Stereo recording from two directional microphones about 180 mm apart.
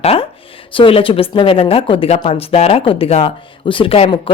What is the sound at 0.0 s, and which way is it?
Speech, 30° left (ahead or behind).